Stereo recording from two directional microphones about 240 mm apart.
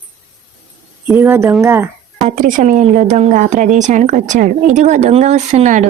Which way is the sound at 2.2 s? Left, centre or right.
Right.